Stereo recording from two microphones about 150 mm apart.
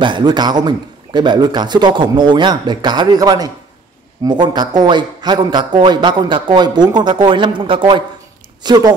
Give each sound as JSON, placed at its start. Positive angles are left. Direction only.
{"t": 0.0, "sound": "a man's voice", "side_deg": -30}